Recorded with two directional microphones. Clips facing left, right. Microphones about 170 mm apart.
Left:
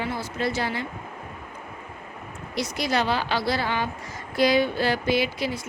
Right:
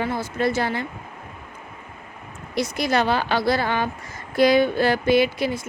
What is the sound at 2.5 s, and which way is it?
Speech, 50° right (ahead or behind).